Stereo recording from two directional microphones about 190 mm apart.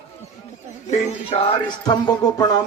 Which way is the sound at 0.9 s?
30° left (ahead or behind).